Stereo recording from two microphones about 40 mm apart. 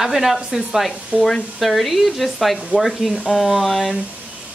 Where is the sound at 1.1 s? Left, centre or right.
Right.